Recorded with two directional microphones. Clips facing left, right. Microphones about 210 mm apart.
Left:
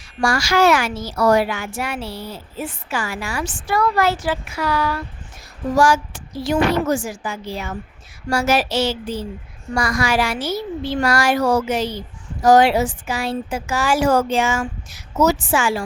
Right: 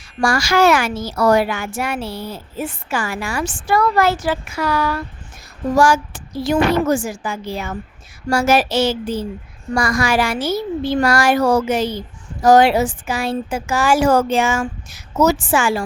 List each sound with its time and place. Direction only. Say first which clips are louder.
0.2 s speech: right 2 dB; 45° right (ahead or behind)